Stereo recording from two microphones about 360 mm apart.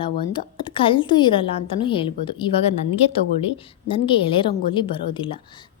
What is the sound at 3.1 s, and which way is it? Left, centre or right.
A woman's voice, centre.